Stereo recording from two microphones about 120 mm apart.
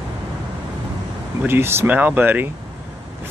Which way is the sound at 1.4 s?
20° right (ahead or behind).